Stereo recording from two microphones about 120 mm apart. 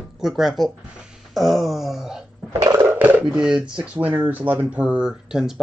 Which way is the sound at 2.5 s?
30° right (ahead or behind).